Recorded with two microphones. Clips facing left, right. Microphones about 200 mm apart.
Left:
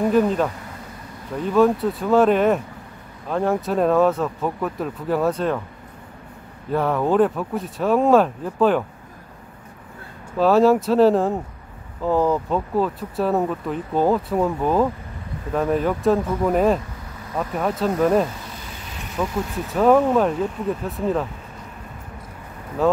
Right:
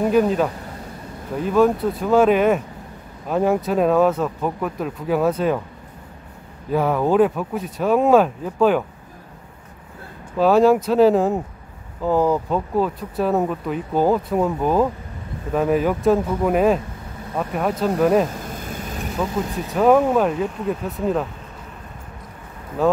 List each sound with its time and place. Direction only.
0.1 s speech: 5° right (ahead or behind)
6.7 s speech: 5° right (ahead or behind)
10.4 s speech: centre (ahead or behind)
18.3 s vehicle: 50° right (ahead or behind)
19.7 s speech: 5° right (ahead or behind)
22.8 s speech: centre (ahead or behind)